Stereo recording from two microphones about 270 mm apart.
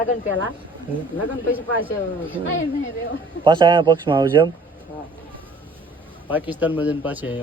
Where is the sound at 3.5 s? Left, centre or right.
Centre.